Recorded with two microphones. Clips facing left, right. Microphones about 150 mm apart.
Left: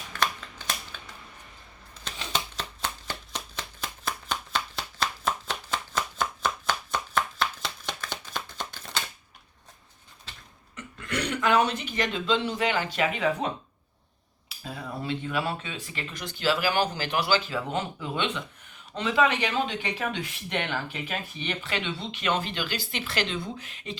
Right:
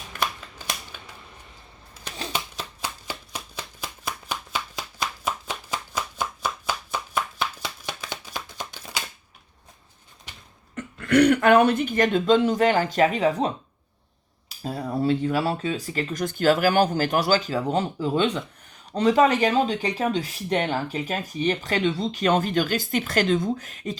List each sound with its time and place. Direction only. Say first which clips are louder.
0.9 s a sound: right 1 dB; 10° right (ahead or behind)
2.3 s shuffling cards: left 3 dB; 10° right (ahead or behind)
10.8 s speech: right 14 dB; 60° right (ahead or behind); by 13.5 s 35° right (ahead or behind)
14.6 s speech: right 10 dB; 40° right (ahead or behind)